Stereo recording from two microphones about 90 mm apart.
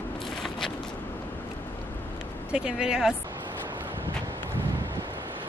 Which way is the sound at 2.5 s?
10° right (ahead or behind).